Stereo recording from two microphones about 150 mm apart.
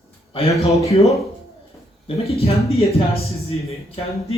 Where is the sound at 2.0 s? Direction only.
40° left (ahead or behind).